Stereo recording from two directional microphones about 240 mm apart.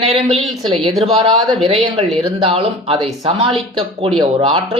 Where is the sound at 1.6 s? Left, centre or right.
Right.